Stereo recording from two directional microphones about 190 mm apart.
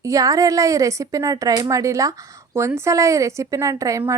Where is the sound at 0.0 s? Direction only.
15° right (ahead or behind).